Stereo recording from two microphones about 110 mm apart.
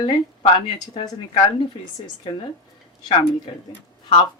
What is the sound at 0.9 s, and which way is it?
Speech, 50° left (ahead or behind).